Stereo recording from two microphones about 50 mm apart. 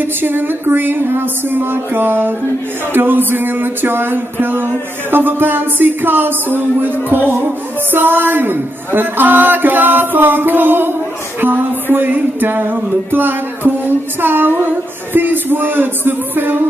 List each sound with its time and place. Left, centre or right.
0.0 s speech: right